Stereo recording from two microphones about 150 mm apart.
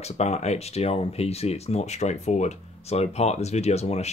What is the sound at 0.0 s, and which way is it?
Speech, 45° left (ahead or behind).